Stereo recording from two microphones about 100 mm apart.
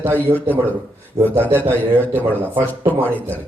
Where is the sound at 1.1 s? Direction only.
20° right (ahead or behind).